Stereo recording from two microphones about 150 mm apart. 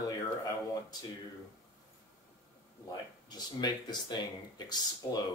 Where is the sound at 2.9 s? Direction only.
30° left (ahead or behind).